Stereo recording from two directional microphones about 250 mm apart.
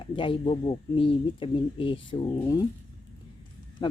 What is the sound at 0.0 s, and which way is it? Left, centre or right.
Speech, left.